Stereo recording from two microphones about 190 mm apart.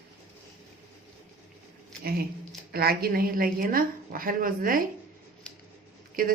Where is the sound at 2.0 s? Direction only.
55° right (ahead or behind).